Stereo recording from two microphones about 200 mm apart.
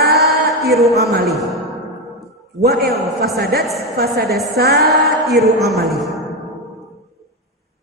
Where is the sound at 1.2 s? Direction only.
Centre (ahead or behind).